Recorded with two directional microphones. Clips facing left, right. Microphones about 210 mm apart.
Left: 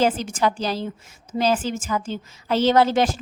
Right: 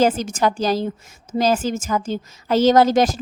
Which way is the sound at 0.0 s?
45° right (ahead or behind).